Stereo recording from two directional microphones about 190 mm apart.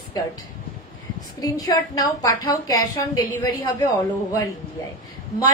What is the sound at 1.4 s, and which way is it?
A woman's voice, 20° left (ahead or behind).